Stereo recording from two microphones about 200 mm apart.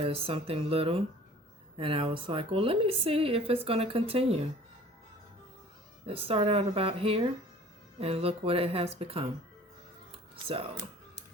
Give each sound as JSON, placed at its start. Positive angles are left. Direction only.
{"t": 0.0, "sound": "a woman's voice", "side_deg": -30}
{"t": 6.1, "sound": "a woman's voice", "side_deg": -30}
{"t": 10.1, "sound": "music", "side_deg": -25}